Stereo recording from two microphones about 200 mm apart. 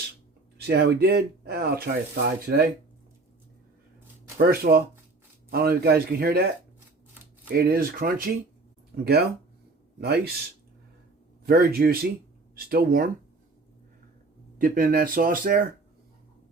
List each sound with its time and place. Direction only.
0.6 s speech: 55° right (ahead or behind)
4.4 s speech: 50° right (ahead or behind)
7.5 s speech: 50° right (ahead or behind)
10.0 s speech: 55° right (ahead or behind)
11.4 s speech: 50° right (ahead or behind)
14.6 s speech: 45° right (ahead or behind)